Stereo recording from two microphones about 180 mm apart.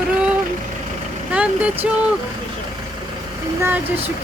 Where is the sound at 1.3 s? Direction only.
5° right (ahead or behind).